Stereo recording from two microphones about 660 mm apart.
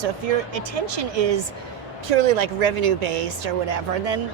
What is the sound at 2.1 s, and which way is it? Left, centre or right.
Speech, right.